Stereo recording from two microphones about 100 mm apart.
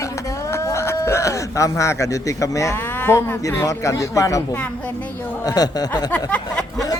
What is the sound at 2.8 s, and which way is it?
Speech, 20° left (ahead or behind).